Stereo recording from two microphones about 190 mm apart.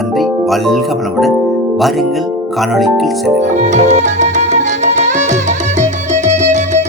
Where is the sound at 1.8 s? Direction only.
Centre (ahead or behind).